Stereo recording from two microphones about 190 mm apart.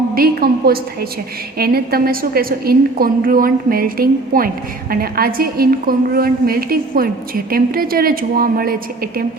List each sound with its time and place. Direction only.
0.1 s a woman's voice: 50° right (ahead or behind)